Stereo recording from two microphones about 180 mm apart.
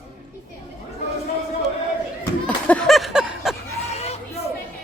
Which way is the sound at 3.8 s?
35° left (ahead or behind).